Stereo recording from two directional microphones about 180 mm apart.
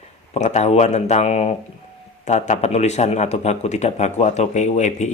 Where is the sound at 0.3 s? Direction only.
40° left (ahead or behind).